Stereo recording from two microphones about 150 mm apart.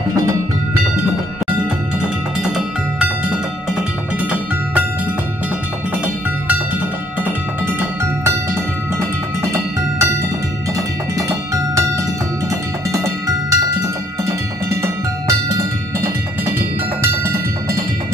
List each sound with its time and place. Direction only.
2.0 s music: 5° right (ahead or behind)
7.2 s music: 15° right (ahead or behind)
9.4 s music: 20° right (ahead or behind)
12.9 s music: 20° right (ahead or behind)